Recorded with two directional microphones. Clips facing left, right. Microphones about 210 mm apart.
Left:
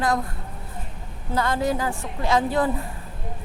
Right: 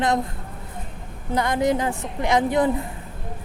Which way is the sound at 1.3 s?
15° right (ahead or behind).